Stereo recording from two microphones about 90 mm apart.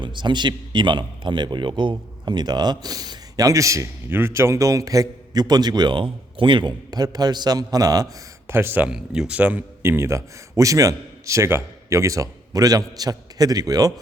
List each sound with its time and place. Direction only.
0.0 s a man's voice: 60° right (ahead or behind); by 8.1 s 45° right (ahead or behind)
8.4 s speech: 25° right (ahead or behind)
8.9 s speech: 10° right (ahead or behind)
9.8 s a man's voice: 30° right (ahead or behind)